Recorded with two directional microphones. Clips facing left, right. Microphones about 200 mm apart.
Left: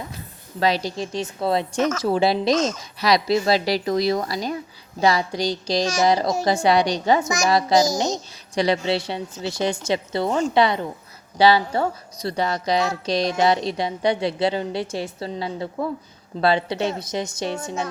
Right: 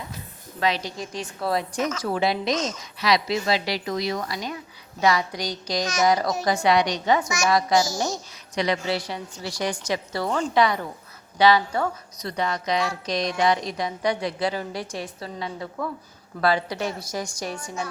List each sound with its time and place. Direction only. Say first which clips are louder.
0.6 s a woman's voice: left 4 dB; 35° left (ahead or behind)
7.9 s a woman's voice: left 4 dB; 20° left (ahead or behind)
8.5 s a woman's voice: left 4 dB; 30° left (ahead or behind)